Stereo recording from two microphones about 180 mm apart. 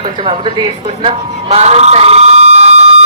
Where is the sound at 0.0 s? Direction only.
30° right (ahead or behind).